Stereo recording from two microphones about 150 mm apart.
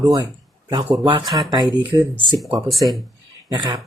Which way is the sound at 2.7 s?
Centre (ahead or behind).